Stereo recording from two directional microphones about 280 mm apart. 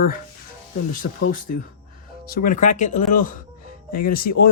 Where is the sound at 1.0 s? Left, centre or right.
Left.